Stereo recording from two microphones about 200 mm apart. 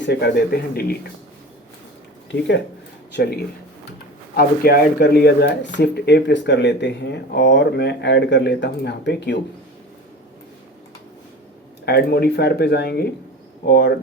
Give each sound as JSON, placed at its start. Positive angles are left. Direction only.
{"t": 0.0, "sound": "speech", "side_deg": 55}
{"t": 3.1, "sound": "speech", "side_deg": 55}
{"t": 4.4, "sound": "speech", "side_deg": 50}
{"t": 11.9, "sound": "speech", "side_deg": 50}